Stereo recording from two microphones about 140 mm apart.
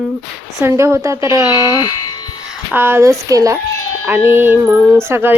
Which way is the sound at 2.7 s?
15° right (ahead or behind).